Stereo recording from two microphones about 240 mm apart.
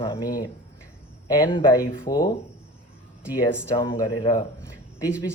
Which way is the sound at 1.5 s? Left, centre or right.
Centre.